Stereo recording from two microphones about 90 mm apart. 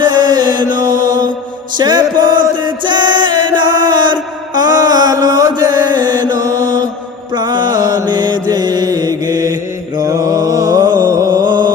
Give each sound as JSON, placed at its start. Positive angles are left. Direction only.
{"t": 0.0, "sound": "mantra", "side_deg": -50}
{"t": 1.7, "sound": "music", "side_deg": -50}
{"t": 6.4, "sound": "mantra", "side_deg": -40}
{"t": 7.3, "sound": "mantra", "side_deg": -50}
{"t": 8.0, "sound": "mantra", "side_deg": -55}
{"t": 10.0, "sound": "music", "side_deg": -40}